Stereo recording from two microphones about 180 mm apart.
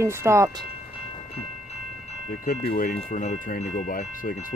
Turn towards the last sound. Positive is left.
turn(degrees=50)  # may be behind; listen again after turning